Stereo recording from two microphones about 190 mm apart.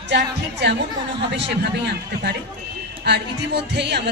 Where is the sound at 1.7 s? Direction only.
60° right (ahead or behind).